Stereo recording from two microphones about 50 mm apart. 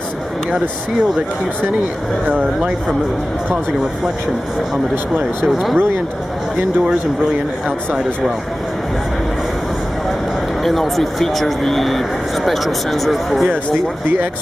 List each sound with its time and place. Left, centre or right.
5.5 s speech: centre
10.6 s speech: centre